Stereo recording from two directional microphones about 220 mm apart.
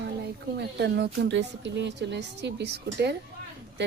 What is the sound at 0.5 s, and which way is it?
A woman's voice, 50° right (ahead or behind).